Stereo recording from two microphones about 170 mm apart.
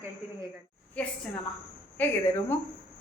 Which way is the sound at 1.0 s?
10° left (ahead or behind).